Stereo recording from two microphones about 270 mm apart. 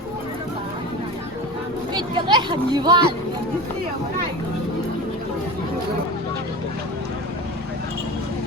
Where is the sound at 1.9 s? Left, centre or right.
Centre.